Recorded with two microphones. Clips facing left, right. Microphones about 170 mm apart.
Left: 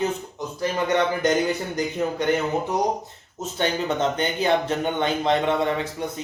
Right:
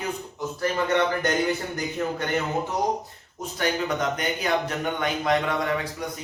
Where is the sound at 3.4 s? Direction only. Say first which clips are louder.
Left 2 dB; 25° left (ahead or behind).